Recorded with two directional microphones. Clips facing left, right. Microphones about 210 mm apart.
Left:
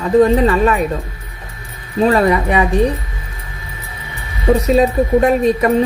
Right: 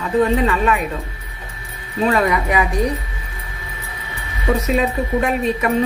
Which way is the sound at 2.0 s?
35° left (ahead or behind).